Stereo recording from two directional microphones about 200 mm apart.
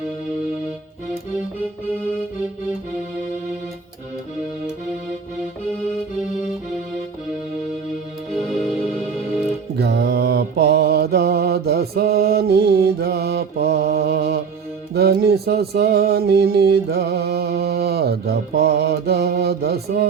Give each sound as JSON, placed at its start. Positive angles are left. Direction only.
{"t": 9.7, "sound": "mantra", "side_deg": -55}
{"t": 14.9, "sound": "music", "side_deg": -50}